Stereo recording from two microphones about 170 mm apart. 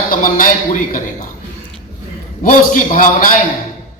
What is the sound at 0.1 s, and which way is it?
Speech, 55° left (ahead or behind).